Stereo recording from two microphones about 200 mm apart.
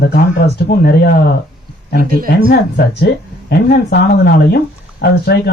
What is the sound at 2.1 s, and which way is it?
Speech, 45° right (ahead or behind).